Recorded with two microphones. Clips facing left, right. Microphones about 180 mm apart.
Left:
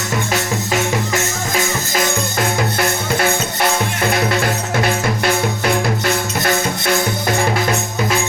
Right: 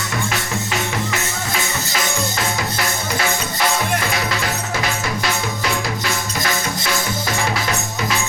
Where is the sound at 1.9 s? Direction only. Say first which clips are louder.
Left 4 dB; 50° left (ahead or behind).